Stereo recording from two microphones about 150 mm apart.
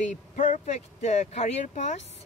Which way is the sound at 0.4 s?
50° left (ahead or behind).